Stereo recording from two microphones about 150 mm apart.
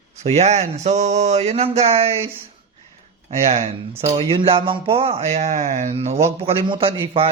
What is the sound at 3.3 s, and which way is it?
A man's voice, 45° right (ahead or behind).